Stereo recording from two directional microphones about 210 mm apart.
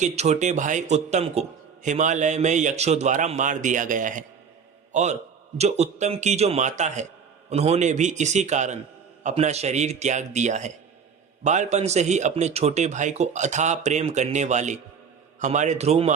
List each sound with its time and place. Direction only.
0.0 s a man's voice: 35° right (ahead or behind)